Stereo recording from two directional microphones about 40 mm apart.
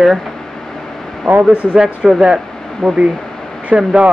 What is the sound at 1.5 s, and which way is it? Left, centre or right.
Speech, right.